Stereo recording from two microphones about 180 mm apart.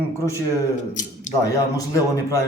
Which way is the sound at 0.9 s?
45° left (ahead or behind).